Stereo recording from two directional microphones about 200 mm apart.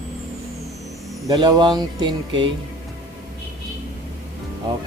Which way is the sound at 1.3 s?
20° right (ahead or behind).